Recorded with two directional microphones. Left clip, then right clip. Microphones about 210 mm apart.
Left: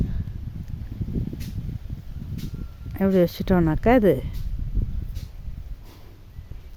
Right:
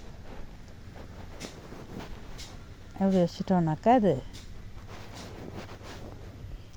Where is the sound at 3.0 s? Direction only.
50° left (ahead or behind).